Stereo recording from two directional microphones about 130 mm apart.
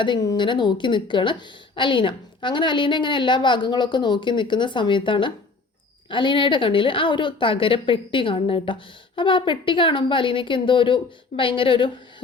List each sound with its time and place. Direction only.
0.0 s a woman's voice: 35° left (ahead or behind)